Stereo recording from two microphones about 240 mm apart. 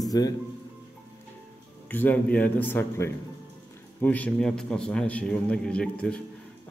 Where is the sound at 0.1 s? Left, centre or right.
Centre.